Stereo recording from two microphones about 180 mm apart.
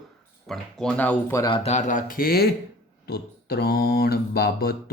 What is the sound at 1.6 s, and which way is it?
Speech, 40° left (ahead or behind).